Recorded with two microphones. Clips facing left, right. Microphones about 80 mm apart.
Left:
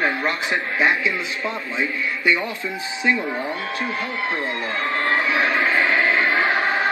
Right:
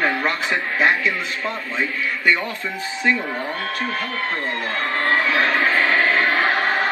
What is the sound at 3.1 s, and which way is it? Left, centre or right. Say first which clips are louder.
A man's voice: even; centre.